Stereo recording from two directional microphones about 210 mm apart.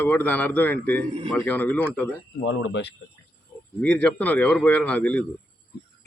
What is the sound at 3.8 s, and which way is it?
A man's voice, 5° left (ahead or behind).